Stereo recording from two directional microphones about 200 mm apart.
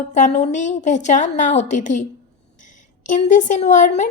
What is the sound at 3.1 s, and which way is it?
Speech, 40° left (ahead or behind).